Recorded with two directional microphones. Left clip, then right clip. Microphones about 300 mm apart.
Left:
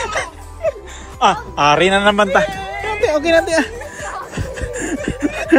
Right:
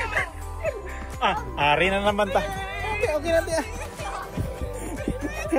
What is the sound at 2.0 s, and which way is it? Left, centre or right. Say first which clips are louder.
Speech: left 10 dB; left.